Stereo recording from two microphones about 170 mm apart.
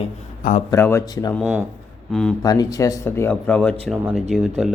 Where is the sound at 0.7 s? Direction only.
15° left (ahead or behind).